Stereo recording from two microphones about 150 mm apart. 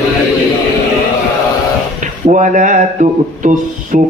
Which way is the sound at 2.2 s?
55° right (ahead or behind).